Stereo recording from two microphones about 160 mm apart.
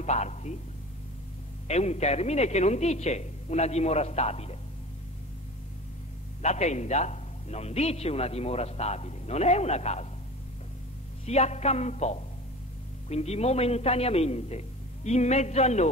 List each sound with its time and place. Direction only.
0.0 s a man's voice: 45° left (ahead or behind)
1.7 s speech: 45° left (ahead or behind)
6.4 s speech: 45° left (ahead or behind)
11.2 s a man's voice: 45° left (ahead or behind)